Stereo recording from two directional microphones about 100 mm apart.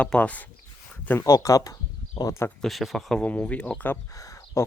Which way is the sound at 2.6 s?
Centre (ahead or behind).